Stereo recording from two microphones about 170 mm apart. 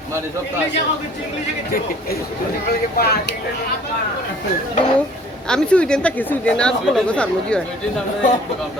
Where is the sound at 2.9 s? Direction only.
65° left (ahead or behind).